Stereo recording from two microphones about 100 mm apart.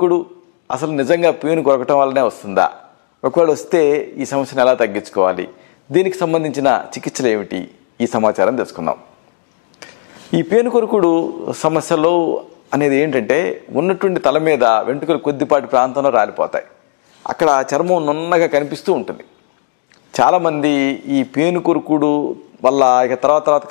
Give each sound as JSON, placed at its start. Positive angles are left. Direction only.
{"t": 0.7, "sound": "speech", "side_deg": 15}
{"t": 10.3, "sound": "speech", "side_deg": 15}
{"t": 20.2, "sound": "speech", "side_deg": 15}